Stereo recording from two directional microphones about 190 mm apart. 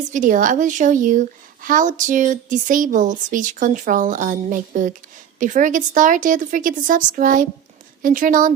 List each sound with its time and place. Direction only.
0.1 s speech: 45° right (ahead or behind)